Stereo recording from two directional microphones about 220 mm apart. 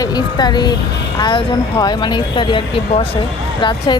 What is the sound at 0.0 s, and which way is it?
Speech, 20° left (ahead or behind).